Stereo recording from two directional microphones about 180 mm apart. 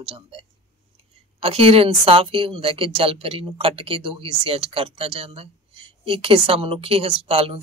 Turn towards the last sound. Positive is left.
turn(degrees=-30)  # may be behind; listen again after turning